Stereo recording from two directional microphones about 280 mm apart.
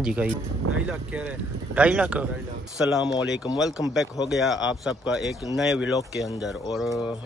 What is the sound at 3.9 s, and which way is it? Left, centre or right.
Speech, centre.